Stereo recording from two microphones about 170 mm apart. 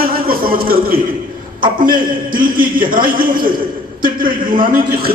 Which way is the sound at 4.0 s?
55° right (ahead or behind).